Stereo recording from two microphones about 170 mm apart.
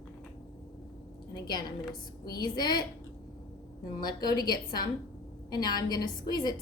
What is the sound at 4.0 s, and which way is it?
A woman's voice, 25° left (ahead or behind).